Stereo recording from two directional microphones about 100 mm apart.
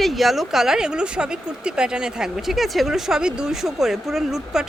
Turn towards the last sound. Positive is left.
turn(degrees=-5)  # may be behind; listen again after turning